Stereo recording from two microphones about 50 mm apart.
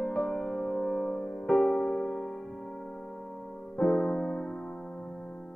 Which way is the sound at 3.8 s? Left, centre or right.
Centre.